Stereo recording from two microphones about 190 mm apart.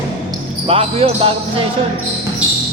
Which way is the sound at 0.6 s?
30° right (ahead or behind).